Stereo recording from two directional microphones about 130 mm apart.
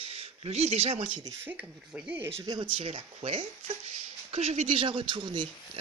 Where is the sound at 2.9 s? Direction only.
55° right (ahead or behind).